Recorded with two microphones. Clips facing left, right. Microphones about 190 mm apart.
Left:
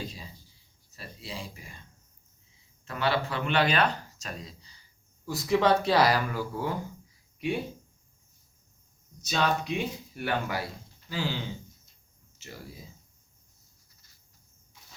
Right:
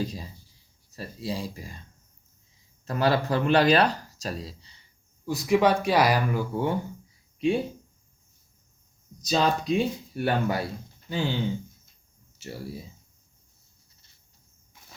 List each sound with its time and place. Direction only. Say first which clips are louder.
0.9 s speech: right 8 dB; 40° right (ahead or behind)
2.8 s speech: right 5 dB; 40° right (ahead or behind)
5.2 s speech: right 3 dB; 15° right (ahead or behind)
6.5 s speech: right 5 dB; 25° right (ahead or behind)
9.2 s speech: right 4 dB; 35° right (ahead or behind)
12.4 s speech: right 8 dB; 30° right (ahead or behind)
13.9 s a sound: even; 25° right (ahead or behind)